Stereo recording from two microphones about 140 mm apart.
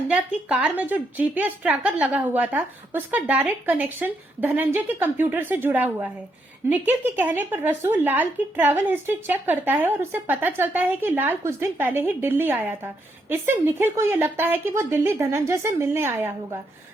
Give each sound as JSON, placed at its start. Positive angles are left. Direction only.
{"t": 0.1, "sound": "a woman's voice", "side_deg": -10}